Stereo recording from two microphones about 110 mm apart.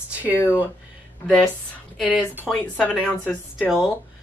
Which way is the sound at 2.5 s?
5° left (ahead or behind).